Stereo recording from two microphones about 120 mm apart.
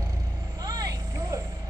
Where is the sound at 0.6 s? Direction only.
30° right (ahead or behind).